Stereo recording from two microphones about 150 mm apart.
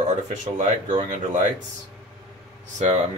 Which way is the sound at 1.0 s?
55° right (ahead or behind).